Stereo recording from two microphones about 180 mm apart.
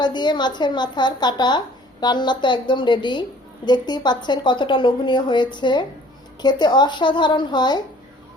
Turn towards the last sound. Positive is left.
turn(degrees=25)  # may be behind; listen again after turning